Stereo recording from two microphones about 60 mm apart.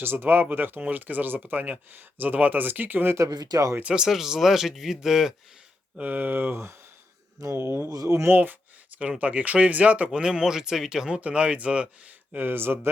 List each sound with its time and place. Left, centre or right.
0.0 s speech: right
3.2 s speech: right
3.9 s speech: centre
6.0 s speech: right
7.9 s speech: right
8.3 s speech: right
12.3 s speech: right